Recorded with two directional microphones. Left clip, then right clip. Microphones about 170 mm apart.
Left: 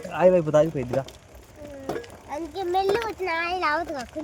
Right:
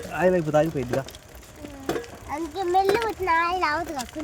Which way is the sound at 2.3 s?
35° left (ahead or behind).